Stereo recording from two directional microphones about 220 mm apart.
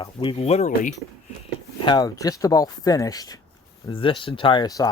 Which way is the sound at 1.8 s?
15° left (ahead or behind).